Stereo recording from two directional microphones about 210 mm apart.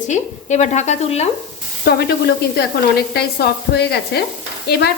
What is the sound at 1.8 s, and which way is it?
Sizzle, 50° left (ahead or behind).